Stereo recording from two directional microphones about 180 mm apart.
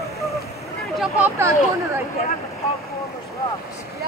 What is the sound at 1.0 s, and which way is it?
Speech, 10° right (ahead or behind).